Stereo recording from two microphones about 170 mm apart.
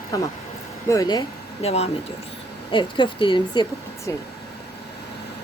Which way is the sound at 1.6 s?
35° left (ahead or behind).